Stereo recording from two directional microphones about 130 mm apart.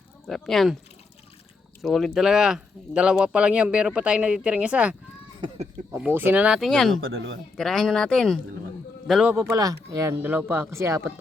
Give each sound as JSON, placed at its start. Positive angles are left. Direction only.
{"t": 0.3, "sound": "speech", "side_deg": 5}
{"t": 1.8, "sound": "speech", "side_deg": 0}
{"t": 6.0, "sound": "a man's voice", "side_deg": -15}
{"t": 9.3, "sound": "speech", "side_deg": -15}
{"t": 9.6, "sound": "speech", "side_deg": -25}